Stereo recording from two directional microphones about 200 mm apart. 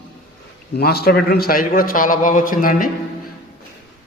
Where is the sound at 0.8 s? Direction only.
50° left (ahead or behind).